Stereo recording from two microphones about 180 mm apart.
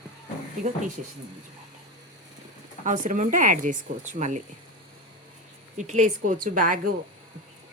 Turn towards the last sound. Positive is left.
turn(degrees=-45)  # may be behind; listen again after turning